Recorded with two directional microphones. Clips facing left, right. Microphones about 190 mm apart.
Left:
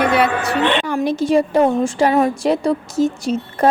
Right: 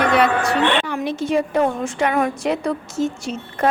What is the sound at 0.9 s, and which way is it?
A woman's voice, 40° left (ahead or behind).